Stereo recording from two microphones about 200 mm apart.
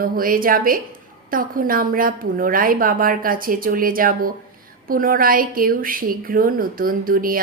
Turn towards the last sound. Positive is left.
turn(degrees=-45)  # may be behind; listen again after turning